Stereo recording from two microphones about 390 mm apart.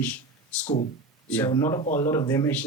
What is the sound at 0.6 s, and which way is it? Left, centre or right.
Speech, centre.